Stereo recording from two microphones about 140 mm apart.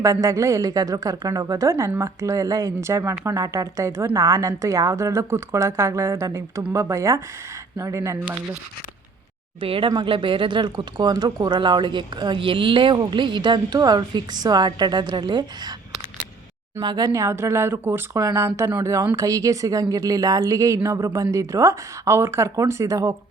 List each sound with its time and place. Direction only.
0.0 s a woman's voice: 20° right (ahead or behind)
9.6 s speech: 40° right (ahead or behind)
16.8 s a woman's voice: 30° right (ahead or behind)